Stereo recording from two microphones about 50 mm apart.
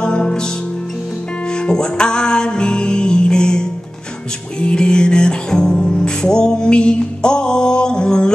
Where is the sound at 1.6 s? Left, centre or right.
Centre.